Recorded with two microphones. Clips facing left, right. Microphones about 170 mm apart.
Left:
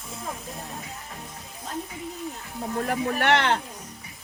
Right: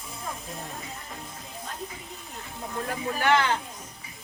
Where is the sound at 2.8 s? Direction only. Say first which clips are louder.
Left 1 dB; 70° left (ahead or behind).